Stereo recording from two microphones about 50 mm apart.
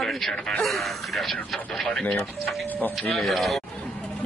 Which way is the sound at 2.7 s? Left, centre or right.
Left.